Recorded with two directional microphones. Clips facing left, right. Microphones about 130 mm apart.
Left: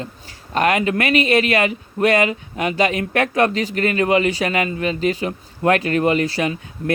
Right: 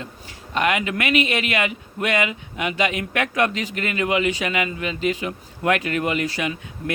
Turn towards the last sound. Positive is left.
turn(degrees=35)  # may be behind; listen again after turning